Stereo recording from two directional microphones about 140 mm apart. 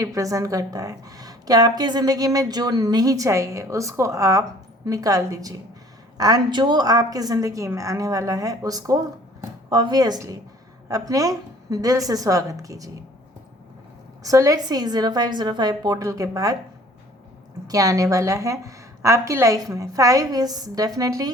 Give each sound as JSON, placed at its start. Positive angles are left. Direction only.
{"t": 0.0, "sound": "a woman's voice", "side_deg": -25}
{"t": 14.3, "sound": "a woman's voice", "side_deg": -25}
{"t": 17.7, "sound": "a woman's voice", "side_deg": -25}